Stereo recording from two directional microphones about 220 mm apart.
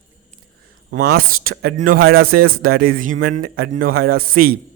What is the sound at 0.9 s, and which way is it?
A man's voice, 50° right (ahead or behind).